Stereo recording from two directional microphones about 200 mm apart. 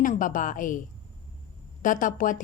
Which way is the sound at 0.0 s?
40° left (ahead or behind).